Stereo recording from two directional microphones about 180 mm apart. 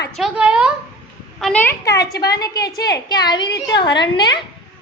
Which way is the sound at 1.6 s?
20° left (ahead or behind).